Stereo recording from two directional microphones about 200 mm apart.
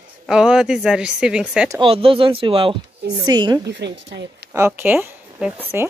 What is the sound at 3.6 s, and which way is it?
Speech, 60° right (ahead or behind).